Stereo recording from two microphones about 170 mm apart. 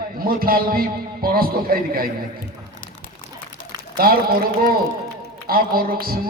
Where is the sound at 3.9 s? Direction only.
60° right (ahead or behind).